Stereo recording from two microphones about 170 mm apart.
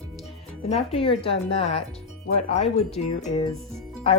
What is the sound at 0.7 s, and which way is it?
A woman's voice, 35° left (ahead or behind).